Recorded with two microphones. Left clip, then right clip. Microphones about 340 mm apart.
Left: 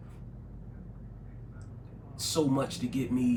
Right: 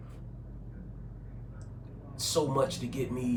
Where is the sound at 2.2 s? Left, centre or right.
Centre.